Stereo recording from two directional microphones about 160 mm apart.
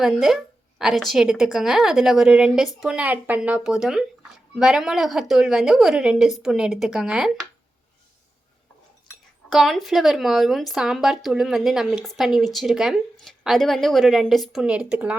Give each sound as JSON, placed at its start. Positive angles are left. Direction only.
{"t": 0.0, "sound": "speech", "side_deg": 0}
{"t": 9.5, "sound": "speech", "side_deg": 0}